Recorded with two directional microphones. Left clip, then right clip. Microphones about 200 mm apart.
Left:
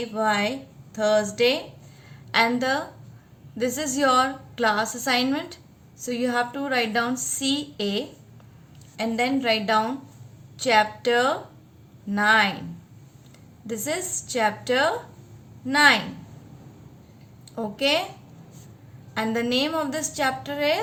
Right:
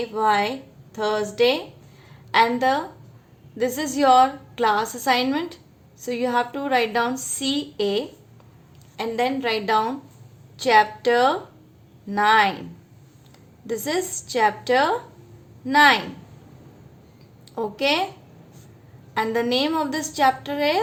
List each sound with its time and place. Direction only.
0.1 s a woman's voice: 20° right (ahead or behind)
13.7 s a woman's voice: 25° right (ahead or behind)
17.5 s a woman's voice: 20° right (ahead or behind)
19.1 s a woman's voice: 20° right (ahead or behind)